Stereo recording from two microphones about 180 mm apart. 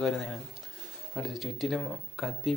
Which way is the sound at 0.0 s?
5° left (ahead or behind).